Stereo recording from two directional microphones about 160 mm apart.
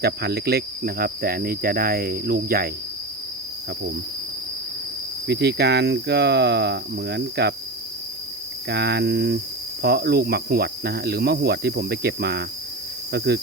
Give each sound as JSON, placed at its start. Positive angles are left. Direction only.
{"t": 0.0, "sound": "cricket", "side_deg": -85}
{"t": 5.3, "sound": "cricket", "side_deg": -90}
{"t": 8.7, "sound": "cricket", "side_deg": -90}
{"t": 9.8, "sound": "speech", "side_deg": -80}